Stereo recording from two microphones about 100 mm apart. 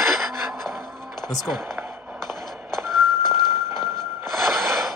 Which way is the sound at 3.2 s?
45° left (ahead or behind).